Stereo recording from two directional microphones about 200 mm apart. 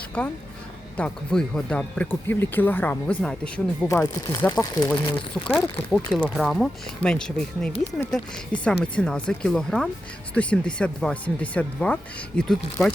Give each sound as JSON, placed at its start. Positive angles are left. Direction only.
{"t": 0.9, "sound": "speech", "side_deg": 5}